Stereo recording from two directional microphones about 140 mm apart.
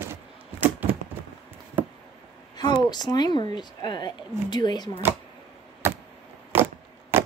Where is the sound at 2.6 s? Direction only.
30° left (ahead or behind).